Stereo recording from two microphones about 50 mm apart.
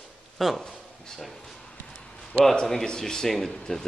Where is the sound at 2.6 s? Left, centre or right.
Centre.